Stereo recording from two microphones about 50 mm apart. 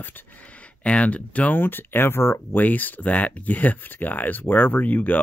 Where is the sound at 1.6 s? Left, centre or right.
Left.